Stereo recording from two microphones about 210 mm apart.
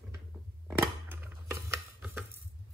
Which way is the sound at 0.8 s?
10° right (ahead or behind).